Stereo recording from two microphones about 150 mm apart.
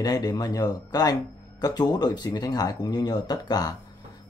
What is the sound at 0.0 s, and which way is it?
Speech, 25° left (ahead or behind).